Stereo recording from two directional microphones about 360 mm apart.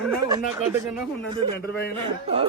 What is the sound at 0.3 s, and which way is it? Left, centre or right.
Speech, centre.